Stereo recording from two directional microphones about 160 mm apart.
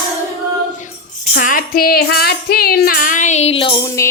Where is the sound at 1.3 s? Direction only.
60° left (ahead or behind); by 3.7 s 35° left (ahead or behind).